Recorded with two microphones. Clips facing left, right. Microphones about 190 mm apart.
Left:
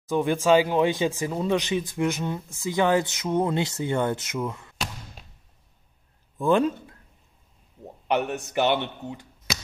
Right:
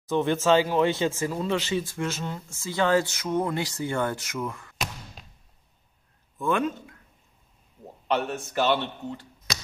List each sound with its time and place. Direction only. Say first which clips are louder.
0.1 s speech: left 1 dB; 10° left (ahead or behind)
6.3 s a man's voice: left 5 dB; 30° left (ahead or behind)
8.1 s speech: left 2 dB; 15° left (ahead or behind)